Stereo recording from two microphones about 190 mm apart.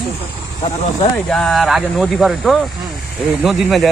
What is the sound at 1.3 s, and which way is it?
Speech, 5° left (ahead or behind).